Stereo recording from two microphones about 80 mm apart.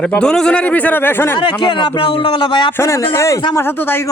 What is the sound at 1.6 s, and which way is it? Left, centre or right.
A man's voice, left.